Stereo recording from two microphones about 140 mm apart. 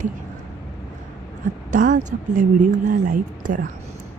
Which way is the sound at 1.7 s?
65° right (ahead or behind).